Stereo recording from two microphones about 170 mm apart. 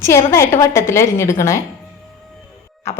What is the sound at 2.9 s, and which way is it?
Speech, 15° left (ahead or behind).